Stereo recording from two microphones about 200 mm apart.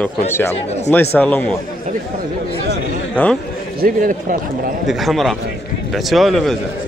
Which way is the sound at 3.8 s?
40° right (ahead or behind).